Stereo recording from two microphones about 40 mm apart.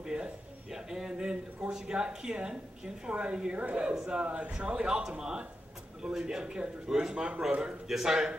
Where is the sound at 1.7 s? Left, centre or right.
Centre.